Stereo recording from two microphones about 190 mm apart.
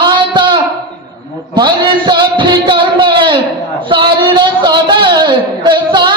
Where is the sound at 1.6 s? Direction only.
25° right (ahead or behind).